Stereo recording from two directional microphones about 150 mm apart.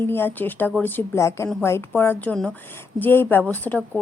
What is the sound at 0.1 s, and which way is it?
Speech, 15° left (ahead or behind).